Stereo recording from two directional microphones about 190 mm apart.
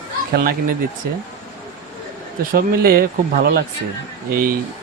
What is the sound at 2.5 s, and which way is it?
Speech, 50° right (ahead or behind).